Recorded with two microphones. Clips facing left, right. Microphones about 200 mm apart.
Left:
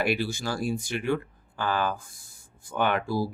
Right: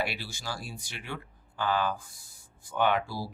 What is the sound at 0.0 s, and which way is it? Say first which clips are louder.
Speech: left 8 dB; 50° left (ahead or behind).